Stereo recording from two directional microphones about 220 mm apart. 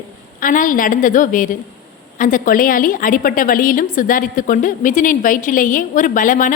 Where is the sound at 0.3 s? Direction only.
35° left (ahead or behind).